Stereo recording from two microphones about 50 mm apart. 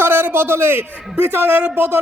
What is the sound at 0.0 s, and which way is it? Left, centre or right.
A man's voice, right.